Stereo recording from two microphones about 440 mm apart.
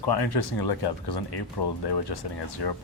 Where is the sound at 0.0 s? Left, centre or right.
Left.